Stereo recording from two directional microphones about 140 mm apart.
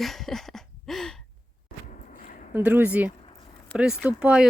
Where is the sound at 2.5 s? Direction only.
15° right (ahead or behind).